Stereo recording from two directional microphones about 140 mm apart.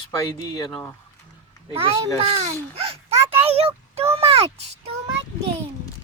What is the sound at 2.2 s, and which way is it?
Speech, 45° right (ahead or behind).